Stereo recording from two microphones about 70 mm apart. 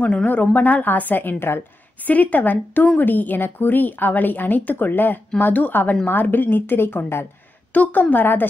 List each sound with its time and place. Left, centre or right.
0.0 s a woman's voice: left